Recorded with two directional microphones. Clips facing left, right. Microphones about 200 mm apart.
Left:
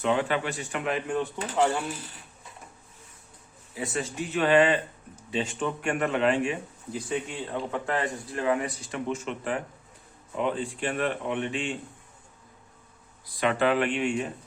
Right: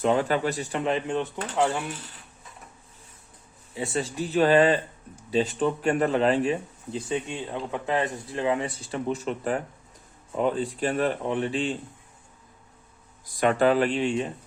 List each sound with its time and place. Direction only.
0.0 s speech: 40° right (ahead or behind); by 1.3 s 25° right (ahead or behind)
3.8 s speech: 30° right (ahead or behind)
13.2 s speech: 45° right (ahead or behind)